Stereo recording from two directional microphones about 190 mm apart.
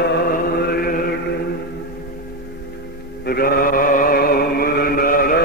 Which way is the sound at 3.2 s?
55° left (ahead or behind).